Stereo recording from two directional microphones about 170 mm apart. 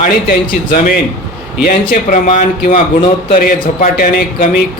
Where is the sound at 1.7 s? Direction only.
45° left (ahead or behind).